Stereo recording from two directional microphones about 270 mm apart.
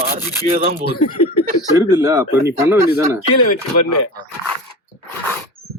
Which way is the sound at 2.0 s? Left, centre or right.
Centre.